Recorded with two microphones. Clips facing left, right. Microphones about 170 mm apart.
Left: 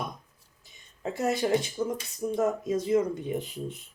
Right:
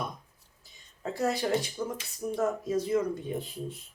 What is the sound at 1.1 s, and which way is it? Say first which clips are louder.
Speech: left 2 dB; 25° left (ahead or behind).